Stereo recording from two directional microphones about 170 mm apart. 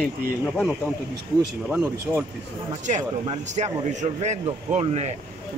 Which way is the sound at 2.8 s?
40° right (ahead or behind).